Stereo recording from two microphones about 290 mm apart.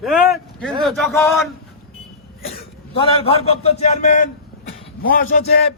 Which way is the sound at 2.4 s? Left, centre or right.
Centre.